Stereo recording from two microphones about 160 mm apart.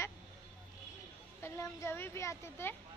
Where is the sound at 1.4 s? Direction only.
15° left (ahead or behind).